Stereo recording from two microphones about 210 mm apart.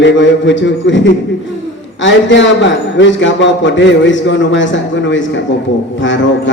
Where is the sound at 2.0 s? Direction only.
60° left (ahead or behind).